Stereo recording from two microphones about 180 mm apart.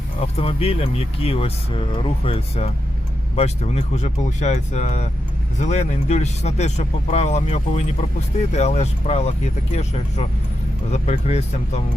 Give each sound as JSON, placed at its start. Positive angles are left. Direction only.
{"t": 0.2, "sound": "speech", "side_deg": 35}